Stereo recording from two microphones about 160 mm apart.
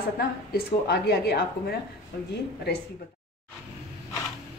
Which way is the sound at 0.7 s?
85° left.